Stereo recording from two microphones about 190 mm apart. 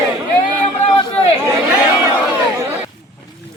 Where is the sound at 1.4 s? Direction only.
15° right (ahead or behind).